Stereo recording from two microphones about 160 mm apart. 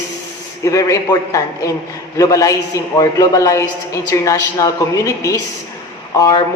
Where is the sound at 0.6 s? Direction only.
20° left (ahead or behind).